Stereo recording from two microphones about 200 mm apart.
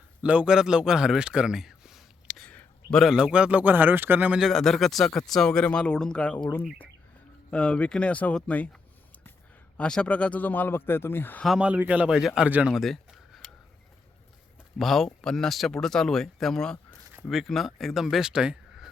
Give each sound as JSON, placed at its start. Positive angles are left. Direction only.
{"t": 0.2, "sound": "a man's voice", "side_deg": -5}
{"t": 9.7, "sound": "a man's voice", "side_deg": 5}
{"t": 14.8, "sound": "a man's voice", "side_deg": 0}